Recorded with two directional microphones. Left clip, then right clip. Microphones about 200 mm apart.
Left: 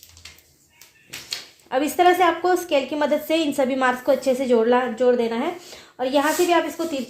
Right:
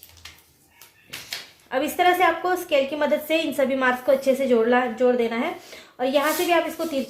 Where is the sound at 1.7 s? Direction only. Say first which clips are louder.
Left 2 dB; 30° left (ahead or behind).